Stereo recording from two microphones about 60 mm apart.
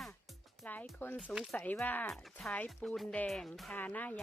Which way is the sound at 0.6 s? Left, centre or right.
Left.